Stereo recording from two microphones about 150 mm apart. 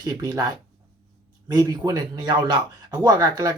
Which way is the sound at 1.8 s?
25° right (ahead or behind).